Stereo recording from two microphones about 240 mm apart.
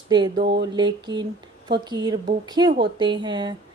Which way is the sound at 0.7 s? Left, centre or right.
Centre.